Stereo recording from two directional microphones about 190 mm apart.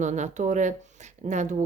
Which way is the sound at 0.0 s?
40° right (ahead or behind).